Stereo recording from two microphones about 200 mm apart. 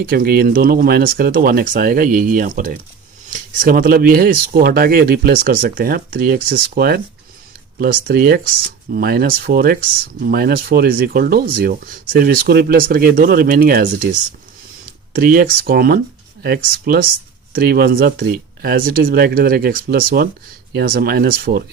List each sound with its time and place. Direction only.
0.0 s speech: 45° right (ahead or behind)
15.1 s speech: 45° right (ahead or behind)